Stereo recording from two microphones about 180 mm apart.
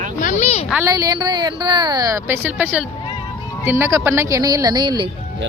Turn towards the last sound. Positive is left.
turn(degrees=-25)  # may be behind; listen again after turning